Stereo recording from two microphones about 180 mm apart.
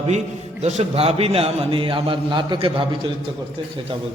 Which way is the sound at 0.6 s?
35° right (ahead or behind).